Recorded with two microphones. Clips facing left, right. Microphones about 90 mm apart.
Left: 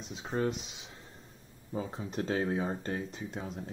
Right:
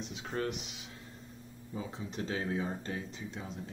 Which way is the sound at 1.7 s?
45° left (ahead or behind).